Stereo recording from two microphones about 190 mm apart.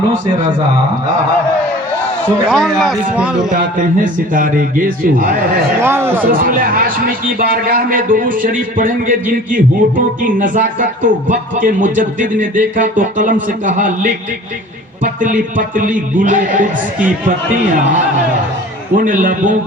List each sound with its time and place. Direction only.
2.5 s speech: centre (ahead or behind)
3.5 s speech: 45° right (ahead or behind)
5.8 s a man's voice: 10° right (ahead or behind)
6.4 s speech: 50° right (ahead or behind)
18.9 s speech: 45° right (ahead or behind)